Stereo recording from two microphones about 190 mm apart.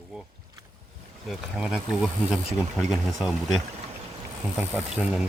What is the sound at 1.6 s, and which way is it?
Speech, 5° right (ahead or behind).